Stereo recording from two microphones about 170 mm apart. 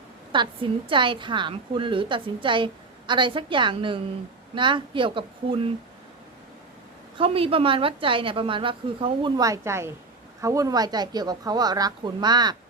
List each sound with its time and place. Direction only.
0.3 s a woman's voice: 30° right (ahead or behind)
7.2 s a woman's voice: 35° right (ahead or behind)